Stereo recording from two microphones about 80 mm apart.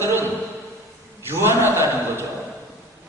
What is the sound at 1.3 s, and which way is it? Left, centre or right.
Speech, right.